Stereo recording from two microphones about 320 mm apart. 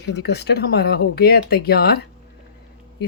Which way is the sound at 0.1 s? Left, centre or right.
Left.